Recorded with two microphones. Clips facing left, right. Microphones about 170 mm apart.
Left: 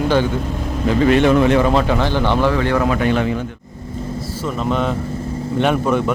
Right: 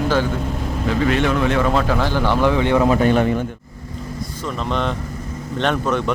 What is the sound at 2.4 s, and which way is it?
Speech, 15° right (ahead or behind).